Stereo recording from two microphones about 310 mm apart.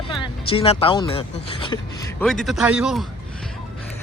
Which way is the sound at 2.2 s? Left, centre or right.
Centre.